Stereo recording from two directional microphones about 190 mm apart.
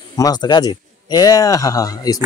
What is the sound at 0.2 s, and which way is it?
Speech, 20° left (ahead or behind).